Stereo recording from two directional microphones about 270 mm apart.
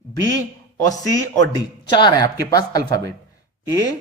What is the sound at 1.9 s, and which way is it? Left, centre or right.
A man's voice, centre.